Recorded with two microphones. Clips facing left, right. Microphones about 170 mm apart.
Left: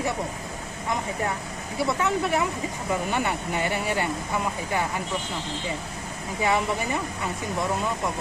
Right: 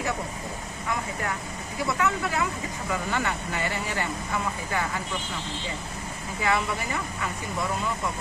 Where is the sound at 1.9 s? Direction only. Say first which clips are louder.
Left 1 dB; 20° left (ahead or behind).